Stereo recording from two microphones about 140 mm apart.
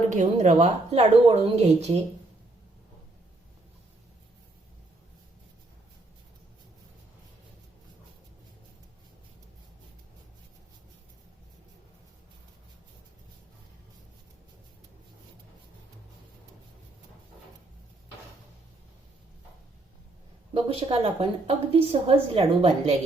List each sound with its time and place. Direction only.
0.1 s a woman's voice: 60° right (ahead or behind)
20.5 s a woman's voice: 45° right (ahead or behind)